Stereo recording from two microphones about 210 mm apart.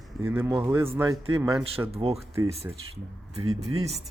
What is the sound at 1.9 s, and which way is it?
Speech, 30° right (ahead or behind).